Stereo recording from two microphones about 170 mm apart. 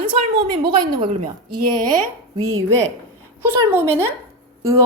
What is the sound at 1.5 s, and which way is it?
Speech, 25° right (ahead or behind).